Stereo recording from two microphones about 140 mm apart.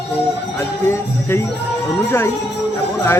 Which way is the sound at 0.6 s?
15° left (ahead or behind).